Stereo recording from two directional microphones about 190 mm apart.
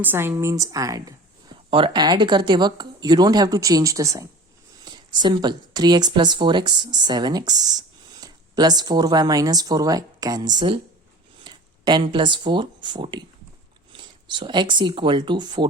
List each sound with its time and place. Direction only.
0.0 s speech: 10° right (ahead or behind)